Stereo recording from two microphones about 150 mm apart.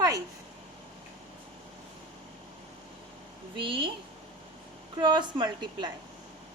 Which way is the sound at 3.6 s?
35° right (ahead or behind).